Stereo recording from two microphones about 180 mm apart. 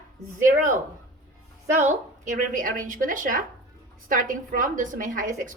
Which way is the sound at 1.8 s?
45° right (ahead or behind).